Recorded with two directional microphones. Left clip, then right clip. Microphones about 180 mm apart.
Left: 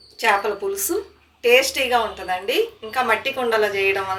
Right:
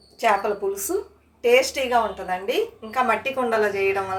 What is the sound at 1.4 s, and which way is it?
A woman's voice, 60° right (ahead or behind).